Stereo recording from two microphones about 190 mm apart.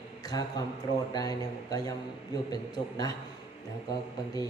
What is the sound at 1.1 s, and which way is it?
Music, 20° left (ahead or behind).